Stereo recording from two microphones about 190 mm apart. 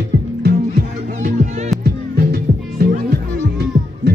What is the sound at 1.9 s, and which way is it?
Music, 55° right (ahead or behind).